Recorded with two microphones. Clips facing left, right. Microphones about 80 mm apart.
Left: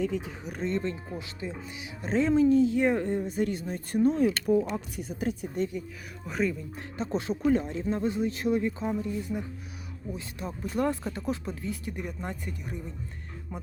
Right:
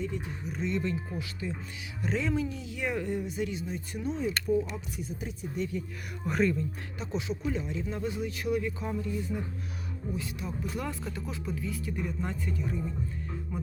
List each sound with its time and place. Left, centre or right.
0.0 s speech: left
0.5 s speech: left
4.3 s speech: left
6.2 s speech: centre
7.0 s speech: left
10.4 s speech: left
11.9 s speech: centre